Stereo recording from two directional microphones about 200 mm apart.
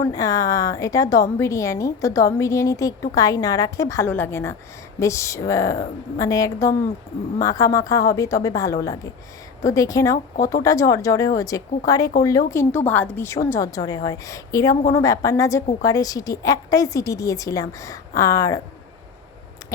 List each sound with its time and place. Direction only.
0.0 s a woman's voice: 15° left (ahead or behind)